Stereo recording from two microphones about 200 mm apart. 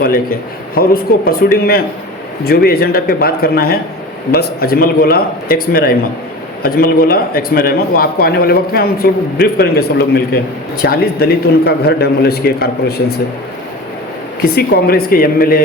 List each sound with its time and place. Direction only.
0.0 s a man's voice: 45° left (ahead or behind)
10.8 s a man's voice: 50° left (ahead or behind)
14.5 s a man's voice: 50° left (ahead or behind)